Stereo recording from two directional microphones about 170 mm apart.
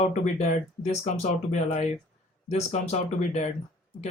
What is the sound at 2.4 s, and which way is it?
Speech, 40° left (ahead or behind).